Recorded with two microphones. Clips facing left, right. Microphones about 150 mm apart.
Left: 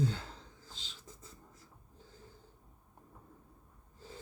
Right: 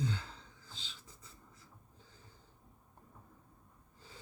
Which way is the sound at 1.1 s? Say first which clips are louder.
Left 6 dB; 50° left (ahead or behind).